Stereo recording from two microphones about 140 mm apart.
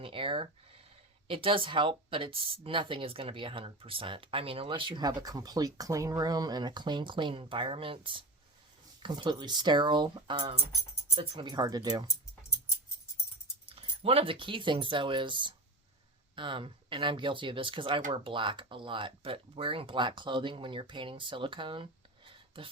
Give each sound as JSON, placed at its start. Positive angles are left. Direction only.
{"t": 0.0, "sound": "a sound", "side_deg": -40}
{"t": 1.3, "sound": "speech", "side_deg": -40}
{"t": 13.7, "sound": "speech", "side_deg": -45}